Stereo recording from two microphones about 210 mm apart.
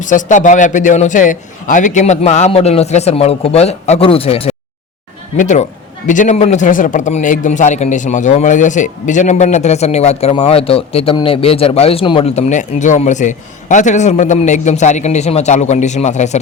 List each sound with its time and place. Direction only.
0.0 s a man's voice: 35° left (ahead or behind)